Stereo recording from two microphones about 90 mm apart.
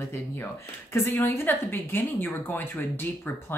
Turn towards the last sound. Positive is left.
turn(degrees=25)  # may be behind; listen again after turning